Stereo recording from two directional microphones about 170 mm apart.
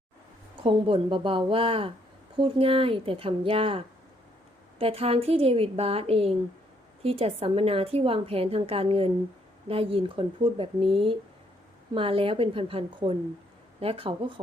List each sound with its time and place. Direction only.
0.6 s a woman's voice: 30° right (ahead or behind)